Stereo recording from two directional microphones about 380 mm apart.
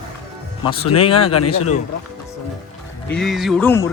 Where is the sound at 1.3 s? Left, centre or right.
Left.